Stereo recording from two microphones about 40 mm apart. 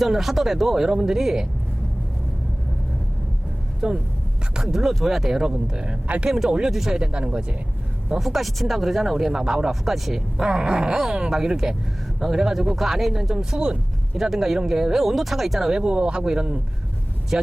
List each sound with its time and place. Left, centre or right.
0.0 s speech: centre
3.8 s speech: right
4.5 s speech: centre
7.0 s speech: right
8.2 s speech: centre
9.1 s speech: centre
10.4 s speech: right; by 13.3 s centre
13.3 s speech: centre
14.2 s speech: centre